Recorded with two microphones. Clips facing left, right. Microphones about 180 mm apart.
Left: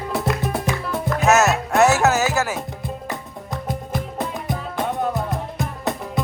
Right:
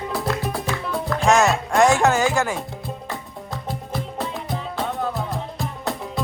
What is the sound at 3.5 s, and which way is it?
Music, 20° left (ahead or behind).